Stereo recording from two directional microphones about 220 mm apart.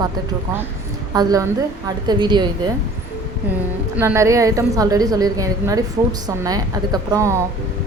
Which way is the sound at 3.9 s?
10° right (ahead or behind).